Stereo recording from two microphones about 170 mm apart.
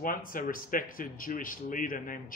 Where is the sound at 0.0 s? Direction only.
55° left (ahead or behind).